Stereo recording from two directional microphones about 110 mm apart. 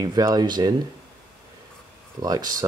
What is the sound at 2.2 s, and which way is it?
Speech, 35° right (ahead or behind).